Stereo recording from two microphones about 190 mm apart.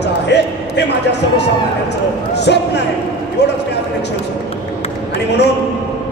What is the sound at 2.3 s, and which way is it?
Speech, 65° left (ahead or behind).